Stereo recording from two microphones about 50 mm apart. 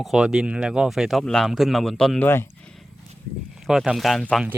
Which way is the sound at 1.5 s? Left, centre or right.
Centre.